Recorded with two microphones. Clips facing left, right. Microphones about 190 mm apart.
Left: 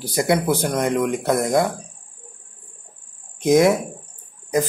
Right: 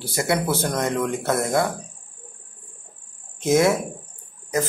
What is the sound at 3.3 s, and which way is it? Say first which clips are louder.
Speech: left 3 dB; 20° left (ahead or behind).